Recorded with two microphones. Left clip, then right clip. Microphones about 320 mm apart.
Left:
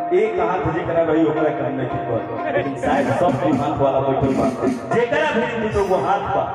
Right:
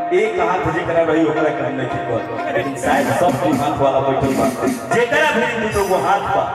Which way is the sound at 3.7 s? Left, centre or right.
Left.